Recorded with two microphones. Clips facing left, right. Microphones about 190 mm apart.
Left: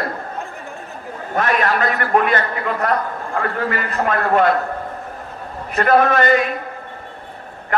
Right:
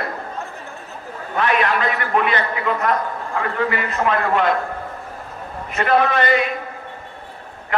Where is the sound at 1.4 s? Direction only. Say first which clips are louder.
Left 1 dB; 45° left (ahead or behind).